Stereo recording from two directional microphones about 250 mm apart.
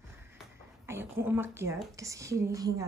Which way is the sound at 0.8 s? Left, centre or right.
Centre.